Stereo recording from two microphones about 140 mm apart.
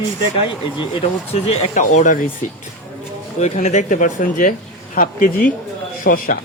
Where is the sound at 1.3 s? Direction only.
55° left (ahead or behind).